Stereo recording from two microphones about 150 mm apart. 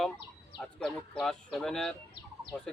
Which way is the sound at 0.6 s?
5° left (ahead or behind).